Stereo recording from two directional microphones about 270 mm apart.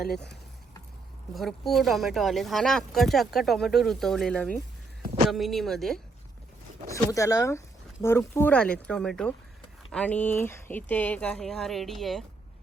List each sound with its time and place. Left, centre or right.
0.0 s speech: left
1.3 s speech: centre
5.0 s a sound: right
5.3 s speech: centre